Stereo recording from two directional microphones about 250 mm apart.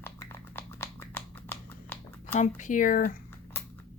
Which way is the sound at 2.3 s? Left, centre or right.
Left.